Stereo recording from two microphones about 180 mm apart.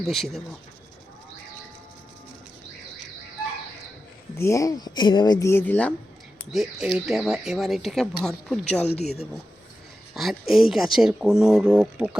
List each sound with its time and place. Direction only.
0.0 s speech: centre (ahead or behind)
4.4 s speech: 15° left (ahead or behind)
6.5 s speech: centre (ahead or behind)
9.0 s speech: 35° left (ahead or behind)
10.2 s speech: centre (ahead or behind)